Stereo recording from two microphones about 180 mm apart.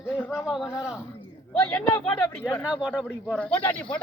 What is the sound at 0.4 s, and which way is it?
Speech, centre (ahead or behind).